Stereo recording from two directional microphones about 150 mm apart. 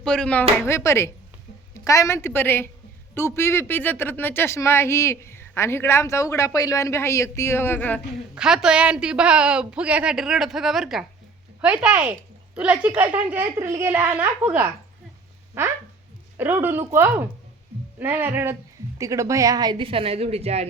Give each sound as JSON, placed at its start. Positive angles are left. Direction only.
{"t": 0.0, "sound": "a woman's voice", "side_deg": 5}
{"t": 0.6, "sound": "speech", "side_deg": 20}
{"t": 8.4, "sound": "a woman's voice", "side_deg": -5}